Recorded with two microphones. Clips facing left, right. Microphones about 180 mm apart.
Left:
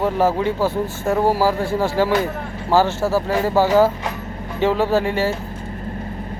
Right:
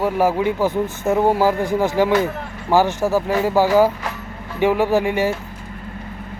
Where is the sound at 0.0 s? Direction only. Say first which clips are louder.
Even; 10° right (ahead or behind).